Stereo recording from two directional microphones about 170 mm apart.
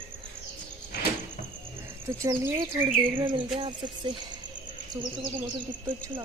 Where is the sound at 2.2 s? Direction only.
20° right (ahead or behind).